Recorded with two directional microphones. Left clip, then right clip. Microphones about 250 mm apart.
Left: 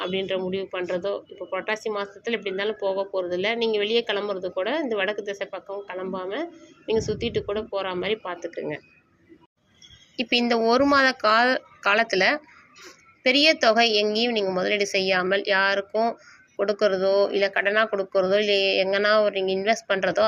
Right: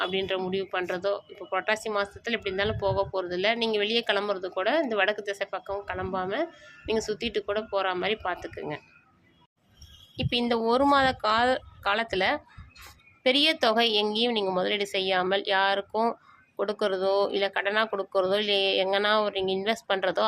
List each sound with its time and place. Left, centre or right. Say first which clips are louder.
0.0 s speech: left 2 dB; right
8.4 s speech: left 5 dB; centre
10.2 s speech: left 5 dB; centre